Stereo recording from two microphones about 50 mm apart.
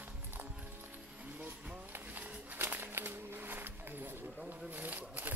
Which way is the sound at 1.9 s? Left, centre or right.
Right.